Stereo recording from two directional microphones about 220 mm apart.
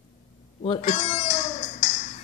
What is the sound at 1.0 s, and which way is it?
Music, 30° left (ahead or behind).